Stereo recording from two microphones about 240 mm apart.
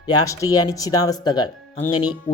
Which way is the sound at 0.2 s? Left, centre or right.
Centre.